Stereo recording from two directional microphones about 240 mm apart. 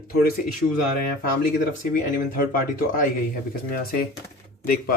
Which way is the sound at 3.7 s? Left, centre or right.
Left.